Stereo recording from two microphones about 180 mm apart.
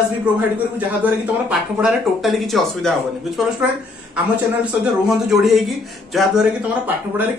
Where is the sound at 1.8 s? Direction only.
Centre (ahead or behind).